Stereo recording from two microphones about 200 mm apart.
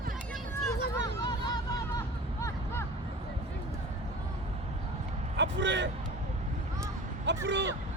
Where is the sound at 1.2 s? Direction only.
20° left (ahead or behind).